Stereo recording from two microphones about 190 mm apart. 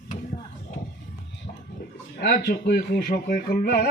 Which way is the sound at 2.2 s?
55° left (ahead or behind).